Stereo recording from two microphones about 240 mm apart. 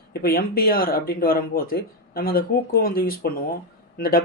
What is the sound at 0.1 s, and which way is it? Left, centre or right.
Speech, left.